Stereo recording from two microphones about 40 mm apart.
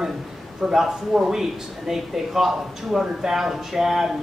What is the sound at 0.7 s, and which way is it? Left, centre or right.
A man's voice, centre.